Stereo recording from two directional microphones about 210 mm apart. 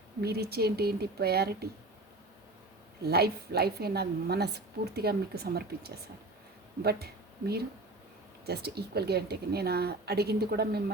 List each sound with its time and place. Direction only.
0.2 s a woman's voice: 50° right (ahead or behind)
3.1 s a woman's voice: 50° right (ahead or behind)